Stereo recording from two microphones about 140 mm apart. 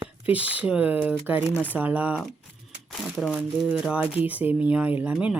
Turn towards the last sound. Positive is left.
turn(degrees=-10)  # may be behind; listen again after turning